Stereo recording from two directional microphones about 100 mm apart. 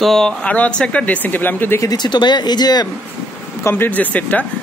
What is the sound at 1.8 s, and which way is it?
Speech, 45° left (ahead or behind).